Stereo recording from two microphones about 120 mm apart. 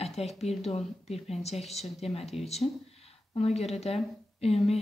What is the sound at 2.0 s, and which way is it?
Speech, 55° left (ahead or behind).